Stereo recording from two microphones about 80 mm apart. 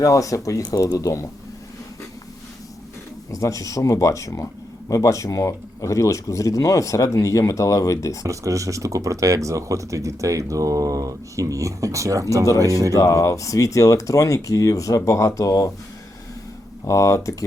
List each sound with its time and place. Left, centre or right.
0.0 s speech: left
3.3 s speech: left
8.3 s speech: right
12.9 s speech: left
16.8 s speech: left